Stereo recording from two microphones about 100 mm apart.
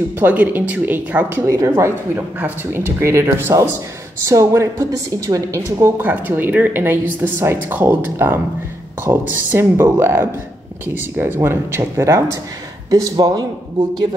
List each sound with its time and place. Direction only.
0.2 s speech: 15° right (ahead or behind)
1.5 s a woman's voice: 30° right (ahead or behind)
5.9 s a woman's voice: 20° right (ahead or behind)
13.2 s a man's voice: 45° right (ahead or behind)